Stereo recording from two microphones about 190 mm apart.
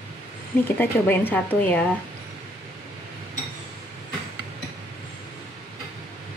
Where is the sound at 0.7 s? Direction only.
10° left (ahead or behind).